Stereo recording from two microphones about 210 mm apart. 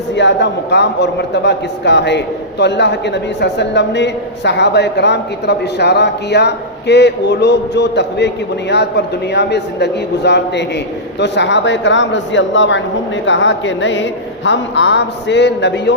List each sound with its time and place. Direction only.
0.1 s a man's voice: 55° left (ahead or behind)